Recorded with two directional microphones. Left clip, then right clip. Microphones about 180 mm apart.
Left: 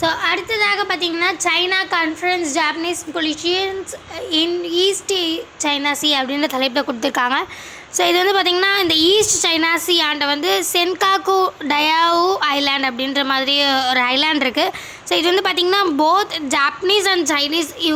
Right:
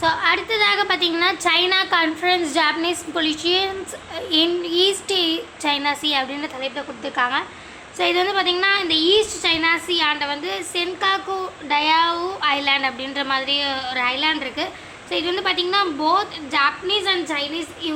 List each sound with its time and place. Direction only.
0.0 s a woman's voice: 20° left (ahead or behind)
6.5 s a woman's voice: 50° left (ahead or behind)